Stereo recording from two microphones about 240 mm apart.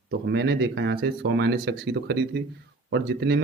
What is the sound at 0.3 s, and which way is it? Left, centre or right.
A man's voice, right.